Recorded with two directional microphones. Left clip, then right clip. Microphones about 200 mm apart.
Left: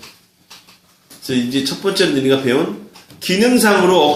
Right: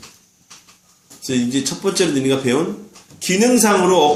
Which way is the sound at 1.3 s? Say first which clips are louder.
Left 2 dB; 30° right (ahead or behind).